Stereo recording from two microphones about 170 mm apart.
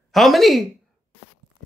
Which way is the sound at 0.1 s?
Centre (ahead or behind).